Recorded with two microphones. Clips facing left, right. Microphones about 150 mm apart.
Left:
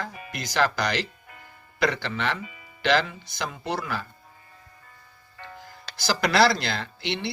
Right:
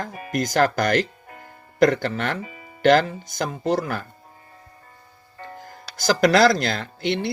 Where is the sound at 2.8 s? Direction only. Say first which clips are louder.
Right 7 dB; 45° right (ahead or behind).